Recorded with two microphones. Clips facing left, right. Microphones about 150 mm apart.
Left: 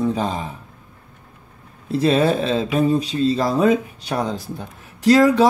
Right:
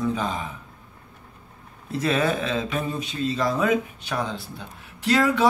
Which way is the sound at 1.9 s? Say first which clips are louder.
Left 6 dB; 30° left (ahead or behind).